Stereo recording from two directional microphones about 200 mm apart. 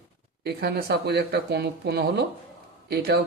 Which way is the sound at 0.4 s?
55° right (ahead or behind).